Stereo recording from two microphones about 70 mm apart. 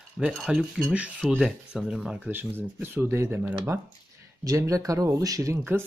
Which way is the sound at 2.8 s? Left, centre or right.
Right.